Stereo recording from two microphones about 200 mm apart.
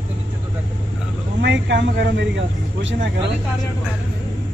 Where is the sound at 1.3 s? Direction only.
60° right (ahead or behind).